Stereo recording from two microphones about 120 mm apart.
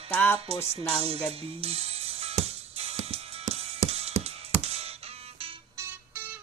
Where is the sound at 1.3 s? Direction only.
55° right (ahead or behind).